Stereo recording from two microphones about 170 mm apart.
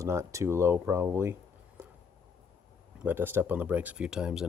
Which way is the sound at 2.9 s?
10° right (ahead or behind).